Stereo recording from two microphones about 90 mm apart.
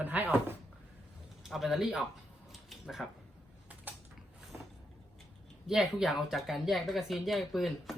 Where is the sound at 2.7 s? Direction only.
Centre (ahead or behind).